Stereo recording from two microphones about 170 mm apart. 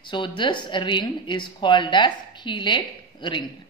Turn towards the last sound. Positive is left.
turn(degrees=30)  # may be behind; listen again after turning